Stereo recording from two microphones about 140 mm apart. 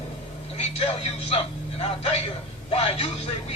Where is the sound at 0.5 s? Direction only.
45° left (ahead or behind).